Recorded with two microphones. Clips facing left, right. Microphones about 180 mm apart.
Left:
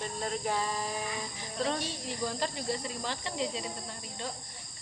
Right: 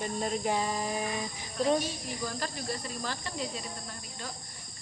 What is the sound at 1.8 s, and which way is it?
Speech, 25° left (ahead or behind).